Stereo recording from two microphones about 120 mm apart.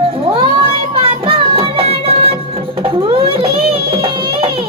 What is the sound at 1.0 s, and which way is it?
Music, 50° right (ahead or behind).